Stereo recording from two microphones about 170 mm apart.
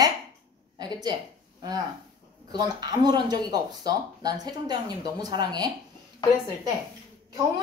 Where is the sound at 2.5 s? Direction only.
25° right (ahead or behind).